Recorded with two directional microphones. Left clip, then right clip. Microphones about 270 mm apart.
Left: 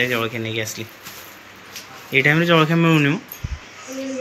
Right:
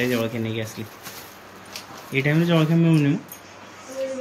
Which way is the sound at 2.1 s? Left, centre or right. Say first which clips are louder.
Left 6 dB; centre.